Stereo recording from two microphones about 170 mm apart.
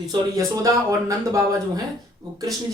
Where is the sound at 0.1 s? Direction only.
20° right (ahead or behind).